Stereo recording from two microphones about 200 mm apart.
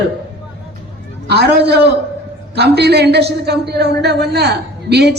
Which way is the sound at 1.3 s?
55° right (ahead or behind).